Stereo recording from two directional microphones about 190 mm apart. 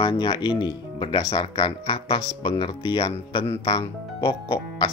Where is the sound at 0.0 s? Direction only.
25° left (ahead or behind).